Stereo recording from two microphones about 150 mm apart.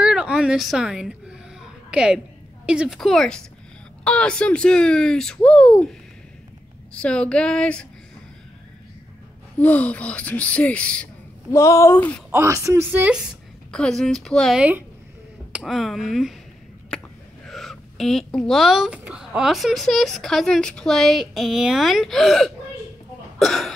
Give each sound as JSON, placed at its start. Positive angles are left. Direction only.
{"t": 0.0, "sound": "a sound", "side_deg": -5}
{"t": 4.0, "sound": "speech", "side_deg": 5}
{"t": 6.9, "sound": "speech", "side_deg": 5}
{"t": 9.6, "sound": "speech", "side_deg": 10}
{"t": 11.5, "sound": "speech", "side_deg": 20}
{"t": 12.3, "sound": "a woman's voice", "side_deg": -20}
{"t": 13.7, "sound": "speech", "side_deg": 5}
{"t": 16.9, "sound": "a sound", "side_deg": 5}
{"t": 17.5, "sound": "speech", "side_deg": 0}